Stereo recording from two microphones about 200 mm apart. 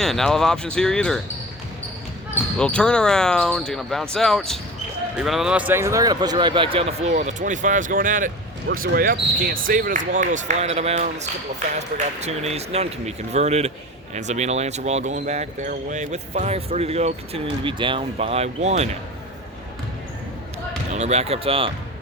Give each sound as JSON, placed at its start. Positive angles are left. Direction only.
{"t": 0.0, "sound": "speech", "side_deg": 0}
{"t": 2.6, "sound": "speech", "side_deg": 5}
{"t": 20.9, "sound": "speech", "side_deg": -35}